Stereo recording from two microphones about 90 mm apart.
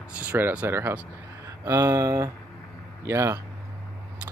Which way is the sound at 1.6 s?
35° right (ahead or behind).